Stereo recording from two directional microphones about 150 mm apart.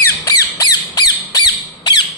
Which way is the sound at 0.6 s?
25° left (ahead or behind).